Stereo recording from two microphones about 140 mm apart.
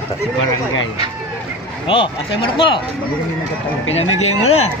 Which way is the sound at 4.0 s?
50° left (ahead or behind).